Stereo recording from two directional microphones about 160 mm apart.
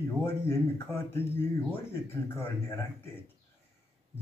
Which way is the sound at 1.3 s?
15° left (ahead or behind).